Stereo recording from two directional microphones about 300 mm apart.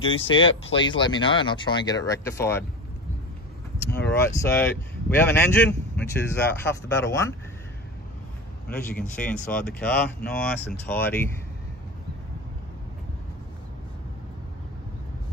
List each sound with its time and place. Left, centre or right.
0.0 s speech: centre
0.4 s speech: left
0.7 s speech: centre
3.9 s speech: centre
9.1 s speech: centre